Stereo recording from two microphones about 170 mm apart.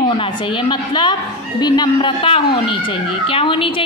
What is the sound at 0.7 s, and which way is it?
A woman's voice, 25° left (ahead or behind).